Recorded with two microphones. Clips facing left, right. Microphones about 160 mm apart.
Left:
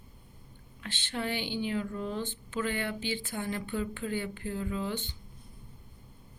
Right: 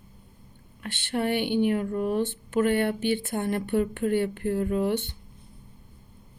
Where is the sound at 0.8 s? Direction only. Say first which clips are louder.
Right 7 dB; 55° right (ahead or behind).